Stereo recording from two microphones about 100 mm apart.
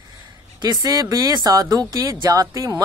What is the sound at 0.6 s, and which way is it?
Speech, 40° right (ahead or behind).